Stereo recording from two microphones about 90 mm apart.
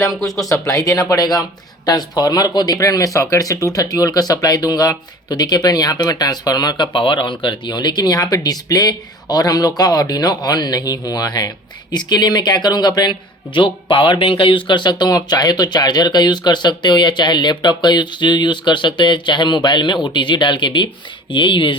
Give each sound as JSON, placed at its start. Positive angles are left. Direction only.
{"t": 0.6, "sound": "speech", "side_deg": 40}